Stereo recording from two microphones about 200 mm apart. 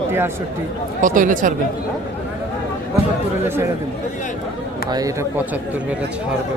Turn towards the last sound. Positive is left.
turn(degrees=-15)  # may be behind; listen again after turning